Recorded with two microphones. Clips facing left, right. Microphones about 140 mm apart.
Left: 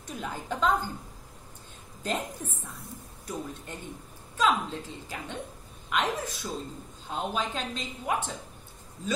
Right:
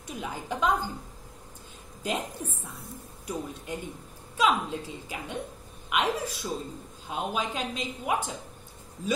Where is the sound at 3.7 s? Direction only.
10° right (ahead or behind).